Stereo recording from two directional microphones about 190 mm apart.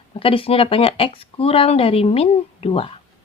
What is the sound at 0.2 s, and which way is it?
Speech, 30° left (ahead or behind).